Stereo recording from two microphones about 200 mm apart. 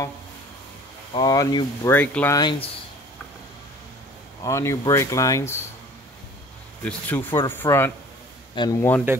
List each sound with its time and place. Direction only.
1.1 s speech: 20° left (ahead or behind)
4.4 s speech: 15° left (ahead or behind)
6.8 s speech: 5° left (ahead or behind)